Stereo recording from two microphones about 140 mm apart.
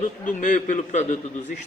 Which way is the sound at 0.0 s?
65° left (ahead or behind).